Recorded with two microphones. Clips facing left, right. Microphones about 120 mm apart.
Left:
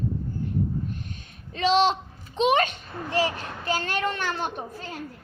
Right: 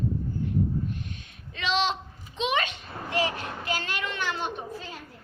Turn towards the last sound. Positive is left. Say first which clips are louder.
# left 2 dB
turn(degrees=45)  # may be behind; listen again after turning